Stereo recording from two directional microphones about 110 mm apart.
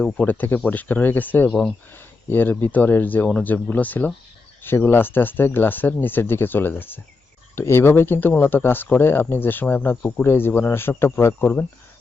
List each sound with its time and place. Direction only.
0.0 s speech: 15° left (ahead or behind)